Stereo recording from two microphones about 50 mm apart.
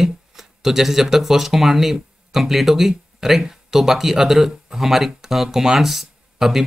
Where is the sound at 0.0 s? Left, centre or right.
Centre.